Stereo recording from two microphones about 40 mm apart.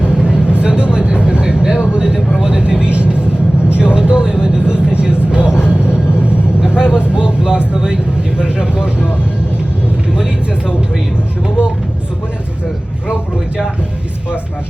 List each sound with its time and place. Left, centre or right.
0.0 s vehicle: right
2.4 s speech: right
5.3 s vehicle: right
6.6 s speech: centre
10.2 s speech: centre